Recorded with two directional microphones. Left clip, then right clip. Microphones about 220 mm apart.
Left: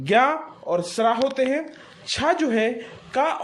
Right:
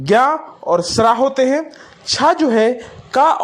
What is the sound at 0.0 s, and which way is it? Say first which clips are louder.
A woman's voice: right 6 dB; 25° right (ahead or behind).